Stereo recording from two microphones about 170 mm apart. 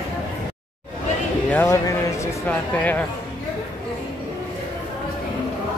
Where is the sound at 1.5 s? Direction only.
15° left (ahead or behind).